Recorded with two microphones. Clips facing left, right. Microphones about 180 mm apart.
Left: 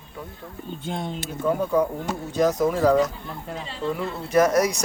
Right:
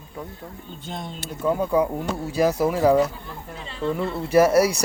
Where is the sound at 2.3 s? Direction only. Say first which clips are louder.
Even; 10° right (ahead or behind).